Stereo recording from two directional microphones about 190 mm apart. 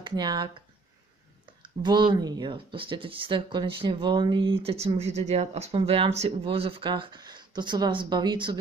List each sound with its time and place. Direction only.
0.0 s speech: 25° right (ahead or behind)
1.6 s speech: 25° right (ahead or behind)